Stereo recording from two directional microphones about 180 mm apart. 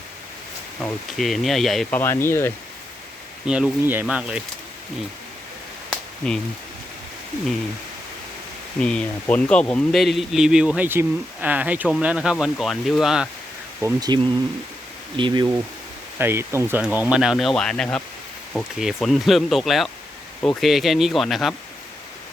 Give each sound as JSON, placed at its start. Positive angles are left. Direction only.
{"t": 0.8, "sound": "speech", "side_deg": 5}
{"t": 2.0, "sound": "speech", "side_deg": 15}
{"t": 3.4, "sound": "speech", "side_deg": -5}
{"t": 5.9, "sound": "a sound", "side_deg": 5}
{"t": 8.8, "sound": "speech", "side_deg": 5}
{"t": 13.8, "sound": "speech", "side_deg": -20}
{"t": 16.1, "sound": "speech", "side_deg": -10}